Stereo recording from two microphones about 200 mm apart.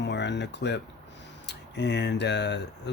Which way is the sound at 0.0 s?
60° left (ahead or behind).